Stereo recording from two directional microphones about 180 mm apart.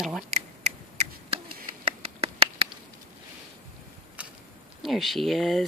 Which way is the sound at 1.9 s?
30° right (ahead or behind).